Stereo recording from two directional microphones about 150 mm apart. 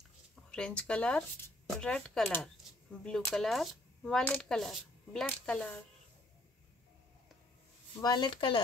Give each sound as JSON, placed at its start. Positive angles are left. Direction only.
{"t": 0.5, "sound": "speech", "side_deg": 5}
{"t": 8.0, "sound": "speech", "side_deg": 30}